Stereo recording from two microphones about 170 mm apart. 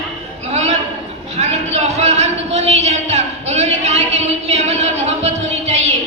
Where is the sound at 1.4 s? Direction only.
40° right (ahead or behind).